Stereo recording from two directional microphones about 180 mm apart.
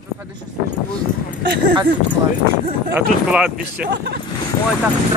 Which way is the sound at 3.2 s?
5° right (ahead or behind).